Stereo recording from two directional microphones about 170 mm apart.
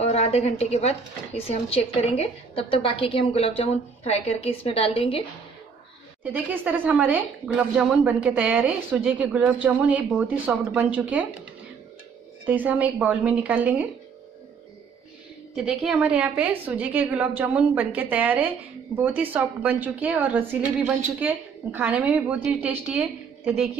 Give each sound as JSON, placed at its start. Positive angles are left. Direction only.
{"t": 0.0, "sound": "speech", "side_deg": 40}
{"t": 6.2, "sound": "speech", "side_deg": -10}
{"t": 12.4, "sound": "speech", "side_deg": -10}
{"t": 15.5, "sound": "speech", "side_deg": -5}